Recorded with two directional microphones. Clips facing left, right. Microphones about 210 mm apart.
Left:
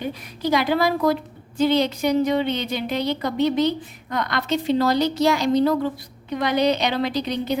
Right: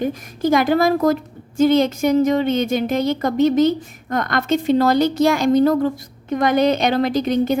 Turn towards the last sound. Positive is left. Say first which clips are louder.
# right 6 dB
turn(degrees=-50)  # may be behind; listen again after turning